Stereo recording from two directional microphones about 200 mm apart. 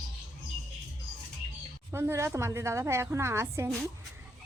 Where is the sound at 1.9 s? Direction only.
10° right (ahead or behind).